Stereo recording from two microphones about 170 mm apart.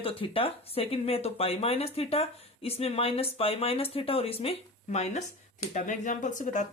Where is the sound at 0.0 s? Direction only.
30° left (ahead or behind).